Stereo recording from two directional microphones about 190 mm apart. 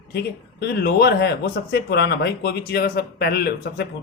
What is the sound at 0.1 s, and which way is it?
Speech, 60° left (ahead or behind).